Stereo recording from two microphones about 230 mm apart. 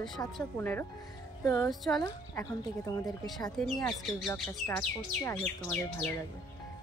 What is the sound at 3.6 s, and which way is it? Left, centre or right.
Speech, centre.